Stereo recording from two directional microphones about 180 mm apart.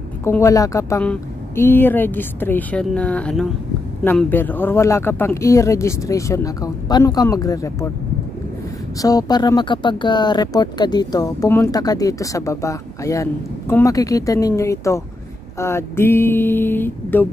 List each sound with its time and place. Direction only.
0.2 s speech: 15° left (ahead or behind)
9.0 s speech: 20° left (ahead or behind)